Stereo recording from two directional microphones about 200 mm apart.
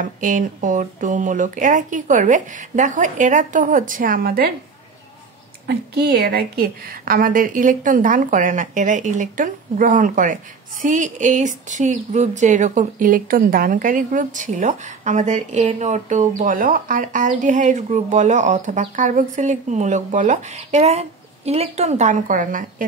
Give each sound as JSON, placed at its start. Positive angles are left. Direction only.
{"t": 0.0, "sound": "a woman's voice", "side_deg": -40}
{"t": 5.7, "sound": "a woman's voice", "side_deg": -50}